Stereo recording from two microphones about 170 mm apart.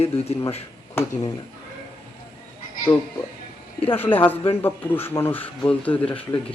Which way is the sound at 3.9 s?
10° left (ahead or behind).